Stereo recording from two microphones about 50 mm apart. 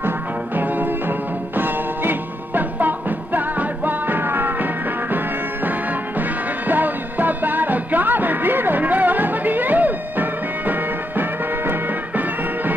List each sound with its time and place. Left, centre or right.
0.6 s music: right